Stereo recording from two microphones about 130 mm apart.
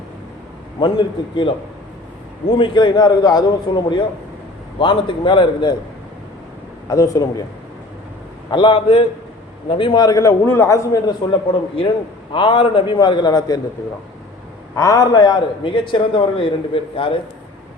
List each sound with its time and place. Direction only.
0.8 s a man's voice: 40° left (ahead or behind)
6.8 s a man's voice: 25° left (ahead or behind)
8.4 s a man's voice: 40° left (ahead or behind)
12.3 s a man's voice: 40° left (ahead or behind)
14.8 s a man's voice: 25° left (ahead or behind); by 17.2 s 45° left (ahead or behind)